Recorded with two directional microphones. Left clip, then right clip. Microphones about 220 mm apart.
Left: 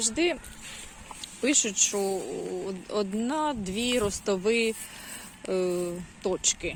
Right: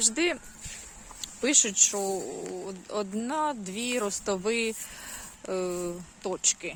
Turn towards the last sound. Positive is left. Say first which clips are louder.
# left 2 dB
turn(degrees=0)  # may be behind; listen again after turning